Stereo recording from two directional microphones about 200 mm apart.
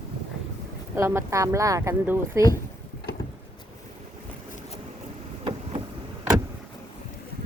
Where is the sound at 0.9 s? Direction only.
15° right (ahead or behind).